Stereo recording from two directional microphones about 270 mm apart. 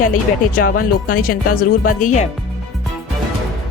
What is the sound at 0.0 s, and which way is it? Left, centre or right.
Music, left.